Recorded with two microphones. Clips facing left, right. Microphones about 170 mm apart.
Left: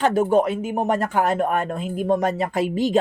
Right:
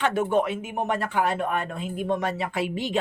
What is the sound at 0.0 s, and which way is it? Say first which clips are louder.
Speech: left 5 dB; 35° left (ahead or behind).